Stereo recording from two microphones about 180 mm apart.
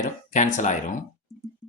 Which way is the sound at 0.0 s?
45° left (ahead or behind).